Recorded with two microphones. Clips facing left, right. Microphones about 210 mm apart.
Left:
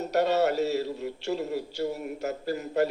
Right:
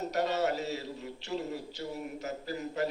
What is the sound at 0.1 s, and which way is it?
A man's voice, 70° left (ahead or behind).